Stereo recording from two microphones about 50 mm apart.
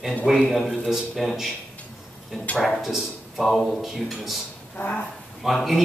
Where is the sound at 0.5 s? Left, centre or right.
Centre.